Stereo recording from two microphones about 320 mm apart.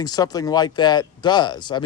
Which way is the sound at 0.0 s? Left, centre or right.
Centre.